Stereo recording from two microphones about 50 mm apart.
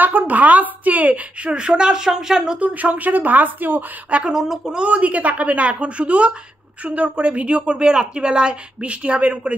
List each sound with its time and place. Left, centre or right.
0.0 s a woman's voice: right
1.5 s speech: centre
2.6 s a woman's voice: right
4.1 s speech: centre
4.8 s speech: right